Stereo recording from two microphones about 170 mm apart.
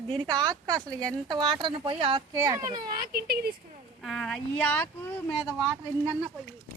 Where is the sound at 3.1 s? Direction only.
65° right (ahead or behind).